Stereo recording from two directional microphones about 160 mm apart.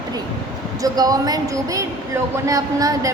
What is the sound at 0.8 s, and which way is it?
A woman's voice, 25° right (ahead or behind).